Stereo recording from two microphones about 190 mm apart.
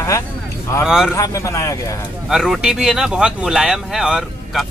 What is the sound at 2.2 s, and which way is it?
Speech, centre (ahead or behind).